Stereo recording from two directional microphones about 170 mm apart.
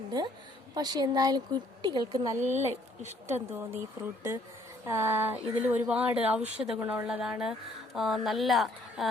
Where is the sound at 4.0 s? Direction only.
20° right (ahead or behind).